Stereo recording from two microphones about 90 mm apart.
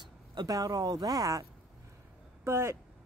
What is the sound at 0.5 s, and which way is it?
Speech, 40° right (ahead or behind).